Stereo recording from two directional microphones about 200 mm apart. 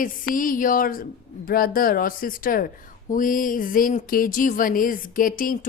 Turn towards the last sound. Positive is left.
turn(degrees=45)  # may be behind; listen again after turning